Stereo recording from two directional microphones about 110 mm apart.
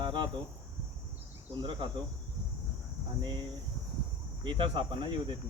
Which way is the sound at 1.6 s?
45° right (ahead or behind).